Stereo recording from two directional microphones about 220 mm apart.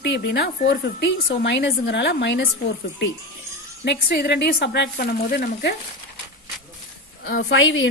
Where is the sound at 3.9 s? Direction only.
45° left (ahead or behind).